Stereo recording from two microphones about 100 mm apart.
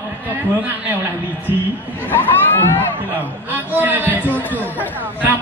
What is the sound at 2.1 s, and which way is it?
Speech, 20° left (ahead or behind).